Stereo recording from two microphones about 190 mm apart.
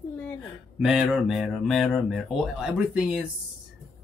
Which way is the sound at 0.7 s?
5° right (ahead or behind).